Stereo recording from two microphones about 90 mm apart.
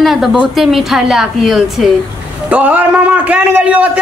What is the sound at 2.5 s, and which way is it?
A man's voice, 15° right (ahead or behind).